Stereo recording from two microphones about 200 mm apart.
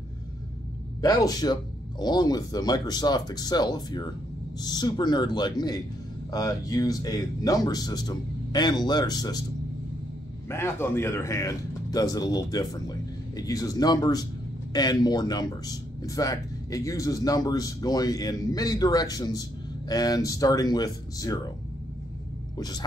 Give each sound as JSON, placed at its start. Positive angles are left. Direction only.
{"t": 1.0, "sound": "speech", "side_deg": 20}
{"t": 10.5, "sound": "speech", "side_deg": 10}
{"t": 22.6, "sound": "speech", "side_deg": 20}